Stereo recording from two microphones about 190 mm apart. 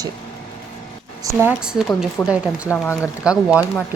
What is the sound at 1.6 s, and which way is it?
A woman's voice, 5° right (ahead or behind).